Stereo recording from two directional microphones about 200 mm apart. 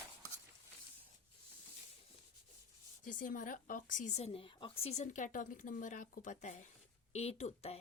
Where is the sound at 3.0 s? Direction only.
40° left (ahead or behind).